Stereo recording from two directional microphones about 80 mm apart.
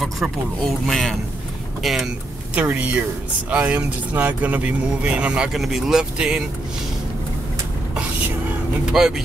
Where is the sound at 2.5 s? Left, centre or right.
Centre.